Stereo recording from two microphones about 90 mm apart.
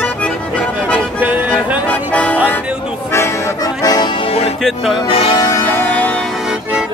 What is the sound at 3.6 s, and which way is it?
Music, 45° left (ahead or behind).